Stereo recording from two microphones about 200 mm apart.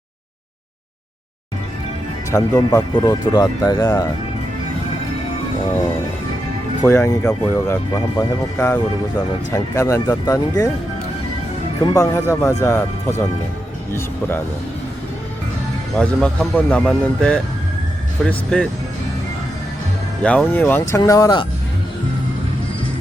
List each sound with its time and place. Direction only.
2.3 s speech: 20° left (ahead or behind)
6.7 s speech: 15° left (ahead or behind)
11.9 s speech: 15° left (ahead or behind)
16.0 s speech: 5° left (ahead or behind)
20.2 s speech: 5° left (ahead or behind)